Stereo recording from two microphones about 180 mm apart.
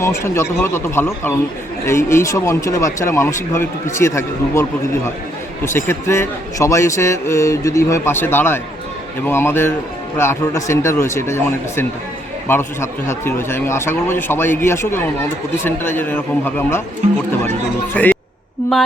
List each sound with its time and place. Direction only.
0.0 s speech: 15° left (ahead or behind)
5.6 s speech: 15° left (ahead or behind)
17.9 s speech: 5° left (ahead or behind)